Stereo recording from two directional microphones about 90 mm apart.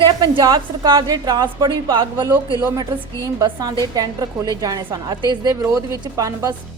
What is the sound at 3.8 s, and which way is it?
A woman's voice, 45° right (ahead or behind).